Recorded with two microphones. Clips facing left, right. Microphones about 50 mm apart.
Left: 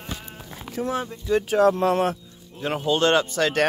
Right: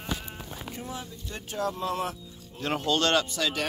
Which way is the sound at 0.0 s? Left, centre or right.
Centre.